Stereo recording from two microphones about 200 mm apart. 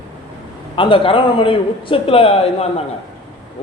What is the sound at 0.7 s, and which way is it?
A man's voice, 25° left (ahead or behind).